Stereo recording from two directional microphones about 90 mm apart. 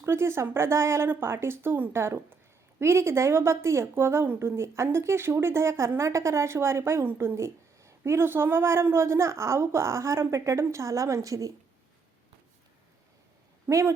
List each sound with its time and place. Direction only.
0.0 s speech: 30° right (ahead or behind)
13.7 s speech: 35° right (ahead or behind)